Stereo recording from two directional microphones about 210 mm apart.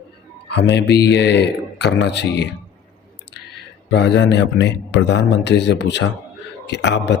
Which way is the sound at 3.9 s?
55° left (ahead or behind).